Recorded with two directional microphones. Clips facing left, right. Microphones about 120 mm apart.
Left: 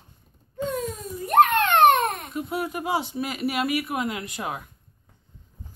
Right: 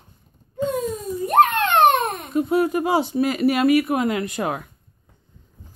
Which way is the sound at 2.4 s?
40° right (ahead or behind).